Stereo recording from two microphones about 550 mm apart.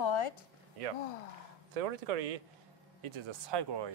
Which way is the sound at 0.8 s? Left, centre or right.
Right.